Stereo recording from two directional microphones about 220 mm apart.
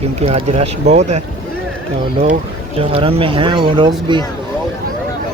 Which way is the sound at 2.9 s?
25° right (ahead or behind).